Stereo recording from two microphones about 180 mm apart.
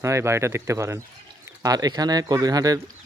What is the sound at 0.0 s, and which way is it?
Speech, 15° right (ahead or behind).